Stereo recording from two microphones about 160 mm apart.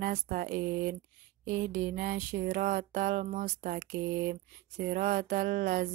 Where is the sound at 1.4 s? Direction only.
60° right (ahead or behind).